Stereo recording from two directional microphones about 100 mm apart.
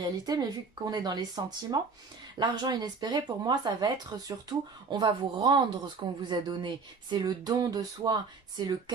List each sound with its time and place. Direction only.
0.0 s speech: 40° right (ahead or behind)